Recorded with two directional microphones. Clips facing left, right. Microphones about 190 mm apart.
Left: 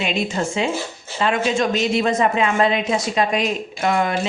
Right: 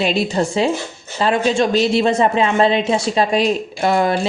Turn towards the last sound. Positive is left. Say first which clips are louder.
# right 4 dB
turn(degrees=-35)  # may be behind; listen again after turning